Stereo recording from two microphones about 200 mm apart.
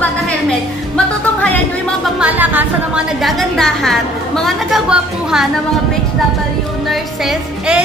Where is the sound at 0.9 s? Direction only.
5° left (ahead or behind).